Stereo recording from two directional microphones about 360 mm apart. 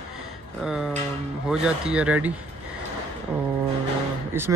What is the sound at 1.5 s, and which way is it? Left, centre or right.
Speech, centre.